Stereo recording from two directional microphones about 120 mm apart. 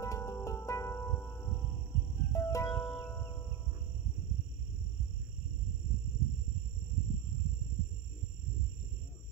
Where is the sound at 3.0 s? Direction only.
25° left (ahead or behind).